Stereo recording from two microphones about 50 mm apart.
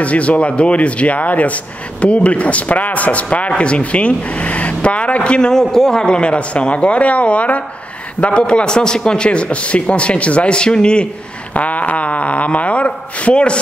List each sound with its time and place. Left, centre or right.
0.0 s a man's voice: left
5.5 s a man's voice: centre
11.5 s a man's voice: left